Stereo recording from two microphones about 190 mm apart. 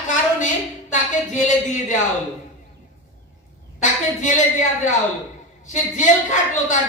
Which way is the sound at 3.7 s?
40° left (ahead or behind).